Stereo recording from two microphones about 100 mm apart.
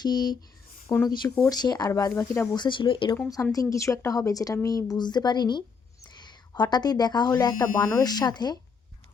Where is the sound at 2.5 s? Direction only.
50° left (ahead or behind).